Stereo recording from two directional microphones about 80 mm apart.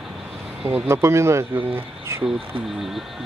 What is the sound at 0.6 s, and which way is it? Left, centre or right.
Speech, right.